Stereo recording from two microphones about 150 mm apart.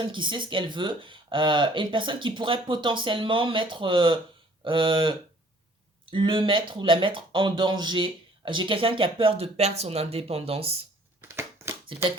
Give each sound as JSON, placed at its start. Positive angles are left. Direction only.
{"t": 0.0, "sound": "speech", "side_deg": -30}
{"t": 11.2, "sound": "crushing", "side_deg": -15}